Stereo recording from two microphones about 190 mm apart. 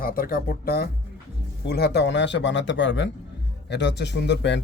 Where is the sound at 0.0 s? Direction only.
50° left (ahead or behind).